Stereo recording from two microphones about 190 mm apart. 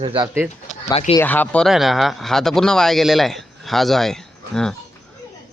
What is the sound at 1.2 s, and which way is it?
Speech, 10° left (ahead or behind).